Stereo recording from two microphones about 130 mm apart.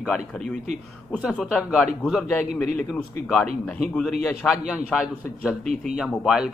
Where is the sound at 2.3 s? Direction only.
15° left (ahead or behind).